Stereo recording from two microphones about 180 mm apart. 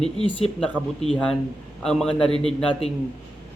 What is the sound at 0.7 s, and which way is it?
A man's voice, 5° left (ahead or behind).